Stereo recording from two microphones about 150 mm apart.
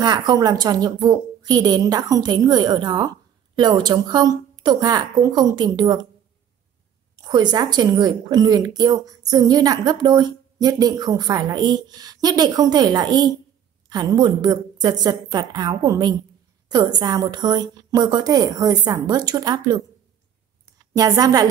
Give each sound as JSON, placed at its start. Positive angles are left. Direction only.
{"t": 0.0, "sound": "a woman's voice", "side_deg": -25}
{"t": 7.2, "sound": "a woman's voice", "side_deg": -30}
{"t": 20.9, "sound": "a woman's voice", "side_deg": -25}